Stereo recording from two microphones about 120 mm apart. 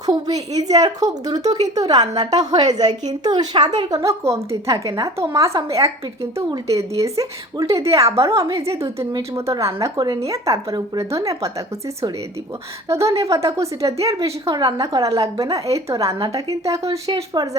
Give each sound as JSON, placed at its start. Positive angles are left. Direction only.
{"t": 0.0, "sound": "a woman's voice", "side_deg": -30}
{"t": 12.9, "sound": "a woman's voice", "side_deg": -25}